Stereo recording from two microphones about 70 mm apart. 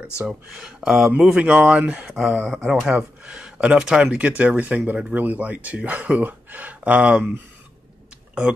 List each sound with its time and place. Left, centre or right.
0.3 s speech: centre
2.0 s speech: centre; by 7.4 s right